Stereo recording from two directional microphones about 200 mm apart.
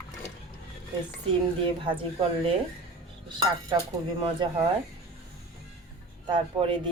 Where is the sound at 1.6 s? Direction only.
25° right (ahead or behind).